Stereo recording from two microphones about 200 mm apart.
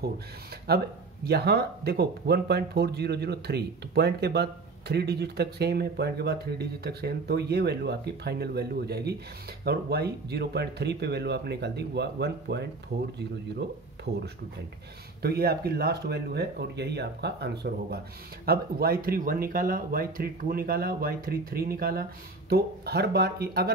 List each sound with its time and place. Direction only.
0.7 s speech: 55° right (ahead or behind)
15.2 s speech: 50° right (ahead or behind)